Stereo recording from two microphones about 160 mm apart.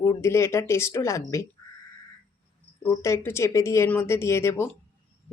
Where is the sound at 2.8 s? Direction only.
15° left (ahead or behind).